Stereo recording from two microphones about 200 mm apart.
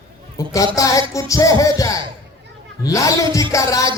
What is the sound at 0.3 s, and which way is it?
A man's voice, 15° left (ahead or behind).